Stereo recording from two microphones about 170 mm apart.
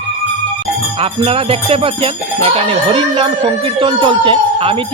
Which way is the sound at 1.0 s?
35° right (ahead or behind).